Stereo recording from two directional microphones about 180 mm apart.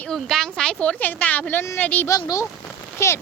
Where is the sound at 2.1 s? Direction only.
20° left (ahead or behind).